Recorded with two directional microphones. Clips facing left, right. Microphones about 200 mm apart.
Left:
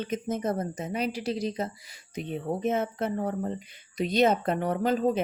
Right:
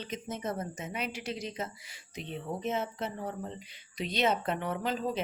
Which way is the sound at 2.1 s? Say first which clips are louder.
Left 6 dB; 50° left (ahead or behind).